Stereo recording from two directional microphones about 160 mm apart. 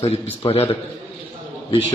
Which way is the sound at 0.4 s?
35° left (ahead or behind).